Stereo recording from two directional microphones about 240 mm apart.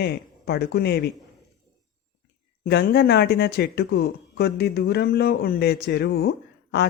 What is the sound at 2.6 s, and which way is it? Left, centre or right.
Speech, left.